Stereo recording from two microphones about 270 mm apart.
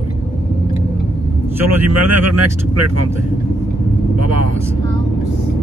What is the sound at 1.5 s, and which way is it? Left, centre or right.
Speech, right.